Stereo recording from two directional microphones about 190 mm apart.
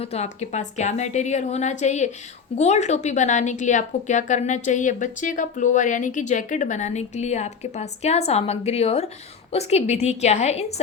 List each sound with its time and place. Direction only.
0.0 s a woman's voice: 35° left (ahead or behind)